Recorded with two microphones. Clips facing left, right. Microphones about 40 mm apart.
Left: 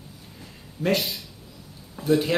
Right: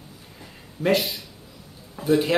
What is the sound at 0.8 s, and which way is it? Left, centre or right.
Speech, centre.